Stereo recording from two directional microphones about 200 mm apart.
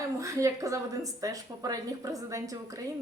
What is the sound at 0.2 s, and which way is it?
A woman's voice, 15° right (ahead or behind).